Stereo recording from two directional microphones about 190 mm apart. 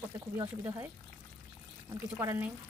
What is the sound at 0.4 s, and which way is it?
Speech, 15° right (ahead or behind).